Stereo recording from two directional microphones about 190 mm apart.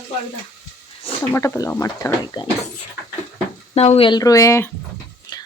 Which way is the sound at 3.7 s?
35° left (ahead or behind).